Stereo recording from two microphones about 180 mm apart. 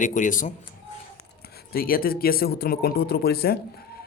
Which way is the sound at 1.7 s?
55° left (ahead or behind).